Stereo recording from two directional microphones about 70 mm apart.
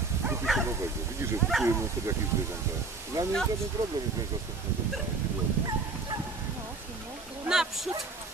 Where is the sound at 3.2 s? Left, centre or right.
Right.